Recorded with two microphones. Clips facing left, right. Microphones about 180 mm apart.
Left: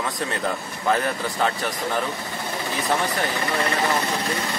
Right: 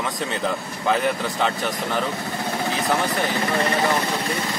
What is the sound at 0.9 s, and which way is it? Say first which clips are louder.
Speech: right 1 dB; centre (ahead or behind).